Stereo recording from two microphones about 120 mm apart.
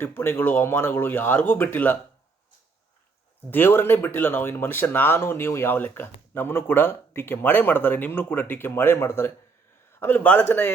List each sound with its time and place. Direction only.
0.0 s speech: 20° left (ahead or behind)
3.5 s speech: 20° left (ahead or behind)